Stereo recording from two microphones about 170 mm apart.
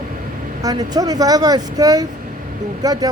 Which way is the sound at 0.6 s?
20° right (ahead or behind).